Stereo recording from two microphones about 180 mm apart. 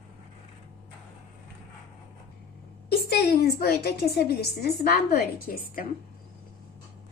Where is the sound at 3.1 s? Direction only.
65° left (ahead or behind).